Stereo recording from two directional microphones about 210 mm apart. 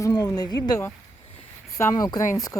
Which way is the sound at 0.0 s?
15° left (ahead or behind).